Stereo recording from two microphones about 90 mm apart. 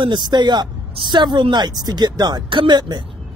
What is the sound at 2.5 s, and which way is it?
Speech, 60° right (ahead or behind).